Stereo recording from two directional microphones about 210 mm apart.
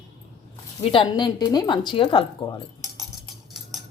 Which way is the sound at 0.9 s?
20° left (ahead or behind).